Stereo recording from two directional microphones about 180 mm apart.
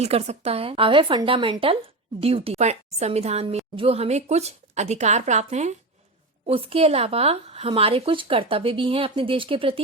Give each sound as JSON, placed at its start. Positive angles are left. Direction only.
{"t": 0.0, "sound": "speech", "side_deg": -35}